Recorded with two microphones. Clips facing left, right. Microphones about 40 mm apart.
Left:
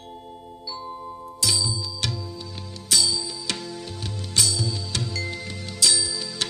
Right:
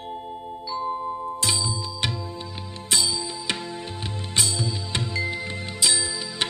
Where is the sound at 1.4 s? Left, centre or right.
Right.